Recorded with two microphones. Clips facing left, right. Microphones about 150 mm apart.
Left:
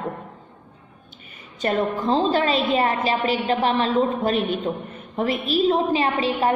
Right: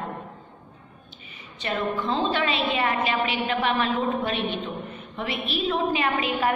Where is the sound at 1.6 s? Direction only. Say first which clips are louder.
Left 5 dB; 40° left (ahead or behind).